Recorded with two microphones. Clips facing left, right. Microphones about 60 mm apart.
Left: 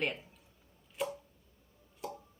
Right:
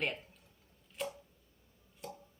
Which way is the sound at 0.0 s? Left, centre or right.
Centre.